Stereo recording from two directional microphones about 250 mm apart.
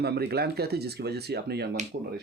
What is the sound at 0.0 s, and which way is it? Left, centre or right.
Speech, right.